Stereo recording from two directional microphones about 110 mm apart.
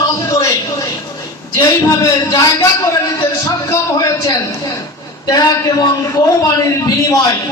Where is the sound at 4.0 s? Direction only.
30° left (ahead or behind).